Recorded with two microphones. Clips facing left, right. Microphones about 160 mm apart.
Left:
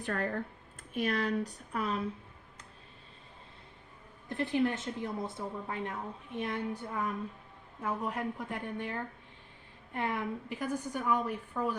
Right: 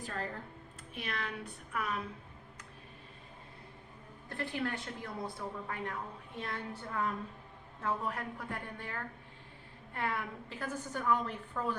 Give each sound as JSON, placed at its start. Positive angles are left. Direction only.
{"t": 0.0, "sound": "speech", "side_deg": 60}
{"t": 0.9, "sound": "speech", "side_deg": 40}
{"t": 4.3, "sound": "a woman's voice", "side_deg": 20}